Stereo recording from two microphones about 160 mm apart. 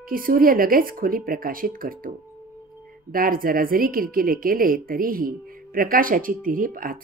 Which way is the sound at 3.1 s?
65° right (ahead or behind).